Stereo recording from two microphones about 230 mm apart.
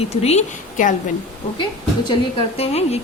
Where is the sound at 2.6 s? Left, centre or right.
Left.